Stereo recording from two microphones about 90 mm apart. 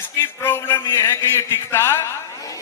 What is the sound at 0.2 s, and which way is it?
A man's voice, 25° left (ahead or behind).